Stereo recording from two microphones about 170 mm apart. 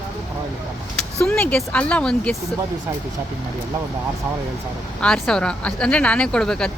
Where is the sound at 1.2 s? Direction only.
5° left (ahead or behind).